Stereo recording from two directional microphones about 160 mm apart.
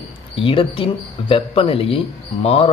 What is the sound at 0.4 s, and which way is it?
Speech, 35° left (ahead or behind).